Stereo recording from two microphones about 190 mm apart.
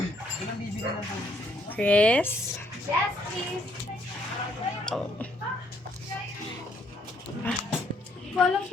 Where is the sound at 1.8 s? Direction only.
5° left (ahead or behind).